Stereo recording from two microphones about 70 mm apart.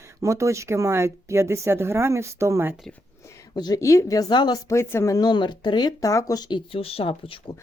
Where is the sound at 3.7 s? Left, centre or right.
Left.